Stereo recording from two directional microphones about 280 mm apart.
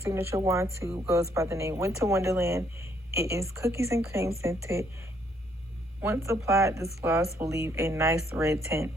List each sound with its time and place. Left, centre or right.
0.0 s speech: centre
6.0 s speech: centre